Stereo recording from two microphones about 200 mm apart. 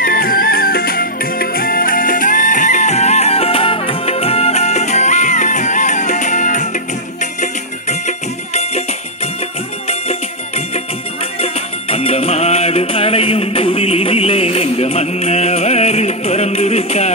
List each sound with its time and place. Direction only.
0.0 s music: 45° left (ahead or behind)
11.4 s music: 30° left (ahead or behind)